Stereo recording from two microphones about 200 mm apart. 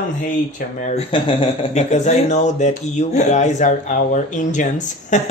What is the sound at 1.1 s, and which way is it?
Speech, 25° left (ahead or behind).